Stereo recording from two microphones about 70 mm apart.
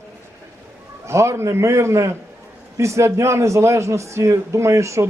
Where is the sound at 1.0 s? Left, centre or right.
Right.